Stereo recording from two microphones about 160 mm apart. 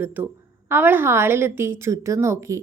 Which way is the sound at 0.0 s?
10° right (ahead or behind).